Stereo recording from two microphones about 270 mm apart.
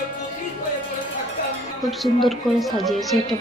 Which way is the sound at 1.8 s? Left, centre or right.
Centre.